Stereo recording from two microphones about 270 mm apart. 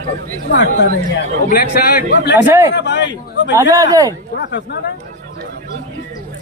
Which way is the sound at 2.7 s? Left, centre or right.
Left.